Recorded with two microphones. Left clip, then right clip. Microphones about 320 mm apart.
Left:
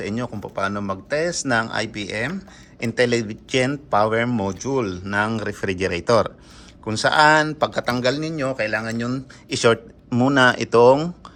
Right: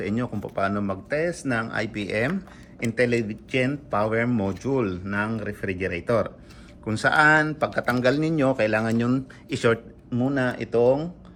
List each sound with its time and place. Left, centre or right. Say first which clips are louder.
0.0 s a man's voice: left 1 dB; centre
2.8 s a man's voice: left 3 dB; centre